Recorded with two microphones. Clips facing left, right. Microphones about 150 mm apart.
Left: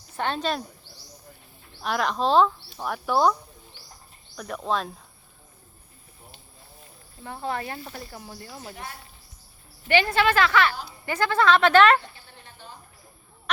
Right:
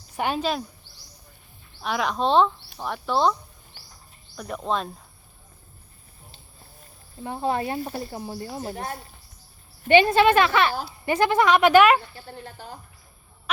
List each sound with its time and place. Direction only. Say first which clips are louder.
0.2 s speech: right 2 dB; 10° right (ahead or behind)
1.8 s speech: even; centre (ahead or behind)
4.4 s speech: right 1 dB; centre (ahead or behind)
7.3 s a woman's voice: right 5 dB; 20° right (ahead or behind)
8.6 s speech: right 6 dB; 45° right (ahead or behind)
9.9 s a woman's voice: right 5 dB; 20° right (ahead or behind)
12.1 s a sound: right 10 dB; 40° right (ahead or behind)